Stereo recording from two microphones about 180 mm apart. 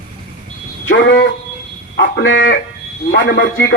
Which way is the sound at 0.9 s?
85° left.